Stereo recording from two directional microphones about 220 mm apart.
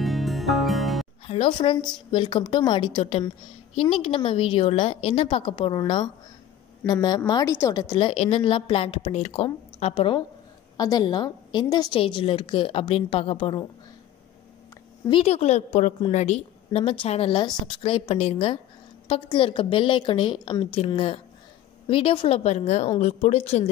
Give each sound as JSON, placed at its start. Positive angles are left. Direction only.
{"t": 0.0, "sound": "music", "side_deg": 0}
{"t": 1.2, "sound": "a woman's voice", "side_deg": 25}
{"t": 15.0, "sound": "a woman's voice", "side_deg": 25}